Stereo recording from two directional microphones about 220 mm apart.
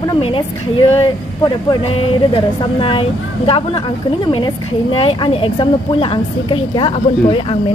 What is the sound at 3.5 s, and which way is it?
A woman's voice, 25° left (ahead or behind).